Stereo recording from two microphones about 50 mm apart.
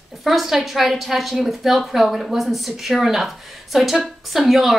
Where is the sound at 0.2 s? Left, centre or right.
Centre.